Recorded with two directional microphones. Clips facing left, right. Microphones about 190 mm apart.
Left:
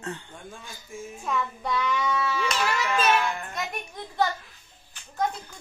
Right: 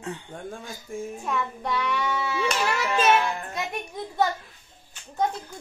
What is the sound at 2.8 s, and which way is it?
Speech, 25° right (ahead or behind).